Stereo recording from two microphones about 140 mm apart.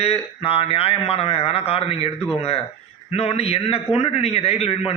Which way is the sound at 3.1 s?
45° left (ahead or behind).